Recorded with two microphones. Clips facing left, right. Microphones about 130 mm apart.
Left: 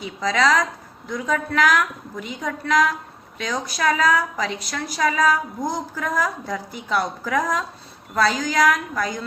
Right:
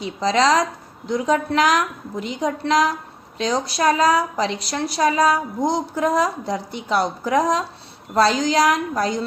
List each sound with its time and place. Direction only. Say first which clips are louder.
0.0 s a woman's voice: right 3 dB; 25° right (ahead or behind)